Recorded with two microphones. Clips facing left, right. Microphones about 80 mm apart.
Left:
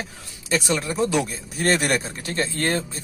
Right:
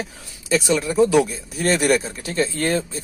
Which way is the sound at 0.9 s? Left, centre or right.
Right.